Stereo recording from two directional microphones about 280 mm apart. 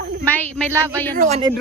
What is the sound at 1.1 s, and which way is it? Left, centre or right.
Speech, right.